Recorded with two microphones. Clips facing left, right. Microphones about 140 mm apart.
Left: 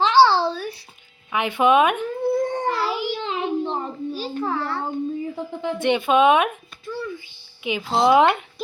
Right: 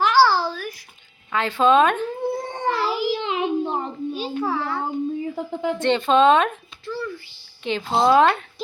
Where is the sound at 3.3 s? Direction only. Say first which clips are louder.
Right 1 dB; 20° right (ahead or behind).